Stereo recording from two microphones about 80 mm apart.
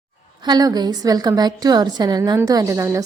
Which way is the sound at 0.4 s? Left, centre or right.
Right.